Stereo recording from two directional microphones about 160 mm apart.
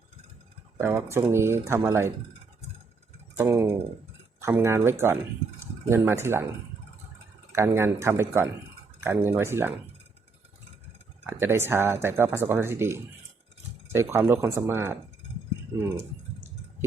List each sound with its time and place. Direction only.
0.8 s speech: 15° right (ahead or behind)
3.3 s speech: 15° right (ahead or behind)
5.5 s a sound: 15° right (ahead or behind)
6.2 s speech: 15° right (ahead or behind)
7.5 s speech: 15° right (ahead or behind)
11.3 s speech: 15° right (ahead or behind)